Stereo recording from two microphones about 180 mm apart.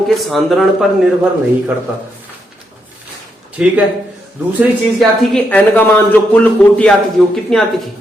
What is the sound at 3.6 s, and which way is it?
Speech, 5° right (ahead or behind).